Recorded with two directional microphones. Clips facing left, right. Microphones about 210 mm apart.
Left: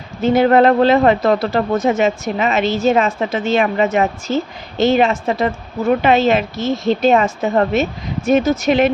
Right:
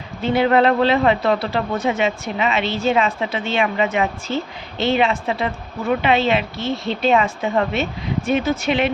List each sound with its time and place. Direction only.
0.2 s a man's voice: 45° left (ahead or behind)